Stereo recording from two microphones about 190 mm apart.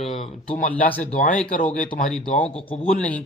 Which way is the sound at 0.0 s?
30° left (ahead or behind).